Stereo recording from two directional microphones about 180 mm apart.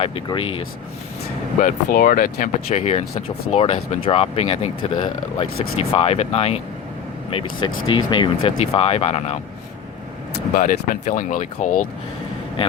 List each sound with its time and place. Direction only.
0.0 s speech: 30° left (ahead or behind)
1.6 s speech: 50° left (ahead or behind)
2.6 s speech: 40° left (ahead or behind)
10.5 s speech: 50° left (ahead or behind)